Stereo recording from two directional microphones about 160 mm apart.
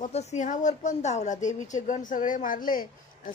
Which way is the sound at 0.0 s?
45° left (ahead or behind).